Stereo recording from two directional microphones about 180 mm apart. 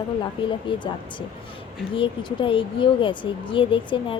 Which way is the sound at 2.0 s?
30° left (ahead or behind).